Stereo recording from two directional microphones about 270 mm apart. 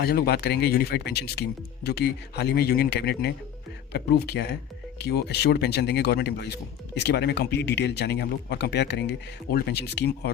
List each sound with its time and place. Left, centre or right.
0.0 s speech: left